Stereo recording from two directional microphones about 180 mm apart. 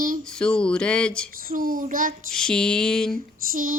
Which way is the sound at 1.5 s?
50° right (ahead or behind).